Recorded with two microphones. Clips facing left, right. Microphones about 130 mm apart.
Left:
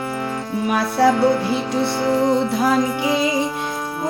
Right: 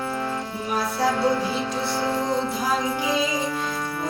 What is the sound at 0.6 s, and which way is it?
Music, 65° left (ahead or behind).